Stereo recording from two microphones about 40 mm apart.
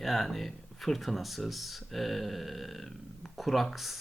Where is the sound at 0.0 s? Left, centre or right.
Centre.